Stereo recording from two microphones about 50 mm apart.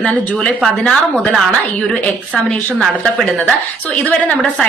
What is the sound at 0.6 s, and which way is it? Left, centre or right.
A woman's voice, centre.